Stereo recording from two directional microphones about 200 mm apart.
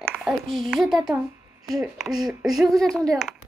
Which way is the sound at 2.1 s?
20° right (ahead or behind).